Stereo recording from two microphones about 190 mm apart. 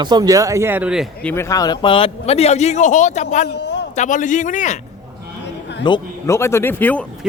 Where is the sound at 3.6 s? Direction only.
65° left (ahead or behind).